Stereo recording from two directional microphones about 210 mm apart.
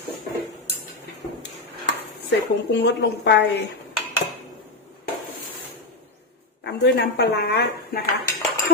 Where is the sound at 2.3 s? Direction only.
55° left (ahead or behind).